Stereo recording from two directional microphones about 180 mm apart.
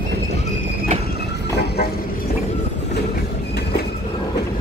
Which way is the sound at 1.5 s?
65° left (ahead or behind).